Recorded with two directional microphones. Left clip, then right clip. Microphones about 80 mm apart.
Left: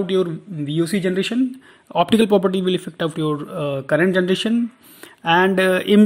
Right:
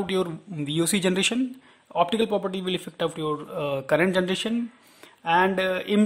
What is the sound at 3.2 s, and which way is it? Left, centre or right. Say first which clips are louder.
Speech: left 5 dB; centre.